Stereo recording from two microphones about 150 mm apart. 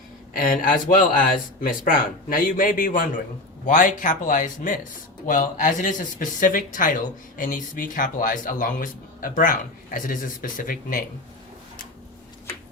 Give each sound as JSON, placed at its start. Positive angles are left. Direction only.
{"t": 0.3, "sound": "speech", "side_deg": 65}